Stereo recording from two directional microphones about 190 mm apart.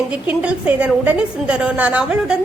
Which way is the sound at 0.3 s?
5° right (ahead or behind).